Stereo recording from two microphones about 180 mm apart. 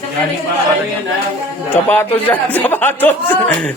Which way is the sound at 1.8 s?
10° left (ahead or behind).